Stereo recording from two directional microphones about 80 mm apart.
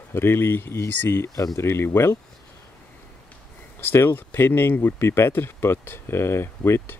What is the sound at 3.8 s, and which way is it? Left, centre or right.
Speech, left.